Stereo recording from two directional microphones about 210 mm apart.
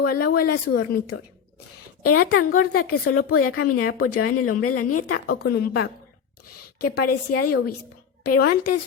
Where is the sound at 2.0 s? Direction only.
90° left.